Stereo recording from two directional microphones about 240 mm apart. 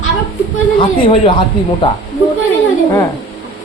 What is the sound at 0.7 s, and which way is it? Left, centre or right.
Speech, left.